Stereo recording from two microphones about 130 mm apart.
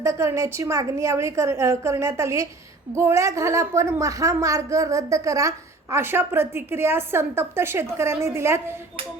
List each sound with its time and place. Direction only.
0.0 s a woman's voice: 25° right (ahead or behind)